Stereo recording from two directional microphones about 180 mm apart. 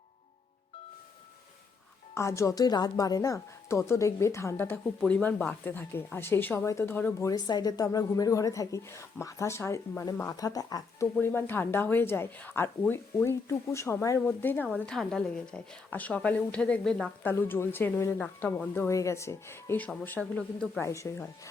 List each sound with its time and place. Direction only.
2.1 s a woman's voice: 15° left (ahead or behind)